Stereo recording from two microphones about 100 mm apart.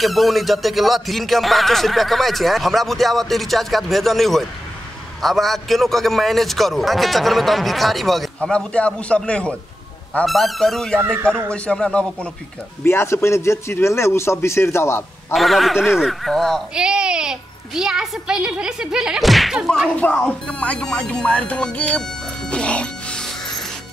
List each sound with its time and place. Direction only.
0.0 s speech: centre (ahead or behind)
12.8 s speech: 25° left (ahead or behind)
15.3 s speech: centre (ahead or behind)
16.7 s a child's voice: 10° right (ahead or behind)
20.0 s speech: 10° left (ahead or behind)
22.5 s music: 10° left (ahead or behind)